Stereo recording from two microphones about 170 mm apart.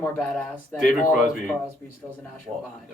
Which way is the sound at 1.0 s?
50° left (ahead or behind).